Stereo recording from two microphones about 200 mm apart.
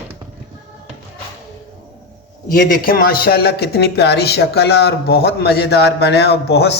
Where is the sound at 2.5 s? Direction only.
45° left (ahead or behind).